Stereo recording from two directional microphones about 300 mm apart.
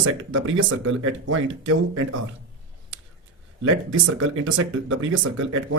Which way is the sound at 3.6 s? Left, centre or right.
Right.